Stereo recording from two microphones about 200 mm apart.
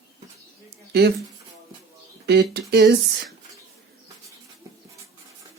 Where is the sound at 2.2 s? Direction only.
55° right (ahead or behind).